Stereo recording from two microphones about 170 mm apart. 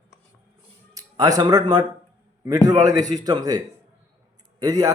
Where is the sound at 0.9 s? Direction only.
20° right (ahead or behind).